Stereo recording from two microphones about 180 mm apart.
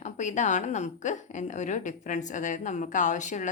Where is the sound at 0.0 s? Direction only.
40° left (ahead or behind).